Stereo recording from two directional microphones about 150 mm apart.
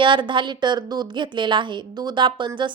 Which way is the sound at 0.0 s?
35° right (ahead or behind).